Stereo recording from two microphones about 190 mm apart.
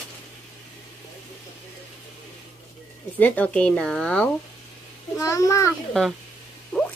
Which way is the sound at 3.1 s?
10° left (ahead or behind).